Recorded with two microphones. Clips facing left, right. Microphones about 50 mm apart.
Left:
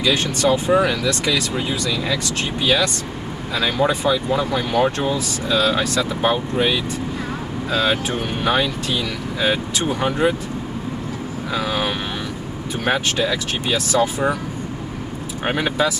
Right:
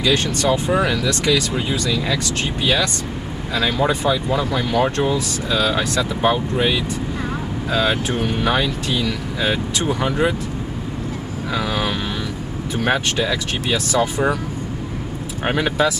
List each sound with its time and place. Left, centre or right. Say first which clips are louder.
0.0 s speech: even; centre
11.5 s vehicle: even; centre
12.7 s speech: right 1 dB; centre
15.4 s speech: right 1 dB; centre